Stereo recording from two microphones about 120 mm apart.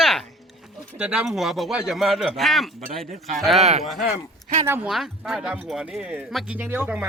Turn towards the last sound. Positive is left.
turn(degrees=-15)  # may be behind; listen again after turning